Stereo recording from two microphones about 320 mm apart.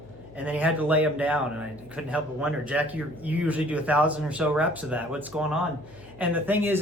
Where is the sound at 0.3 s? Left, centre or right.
Centre.